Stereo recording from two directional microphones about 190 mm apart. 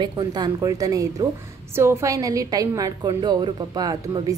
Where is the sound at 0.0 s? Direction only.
20° right (ahead or behind).